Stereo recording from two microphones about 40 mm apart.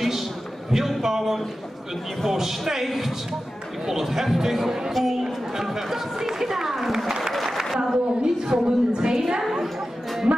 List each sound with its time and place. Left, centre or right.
0.7 s a man's voice: centre
9.4 s chatter: centre